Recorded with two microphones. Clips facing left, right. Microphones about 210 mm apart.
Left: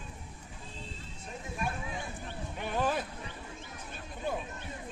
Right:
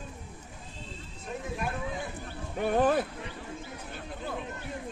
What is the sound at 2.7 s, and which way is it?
Speech, 55° right (ahead or behind).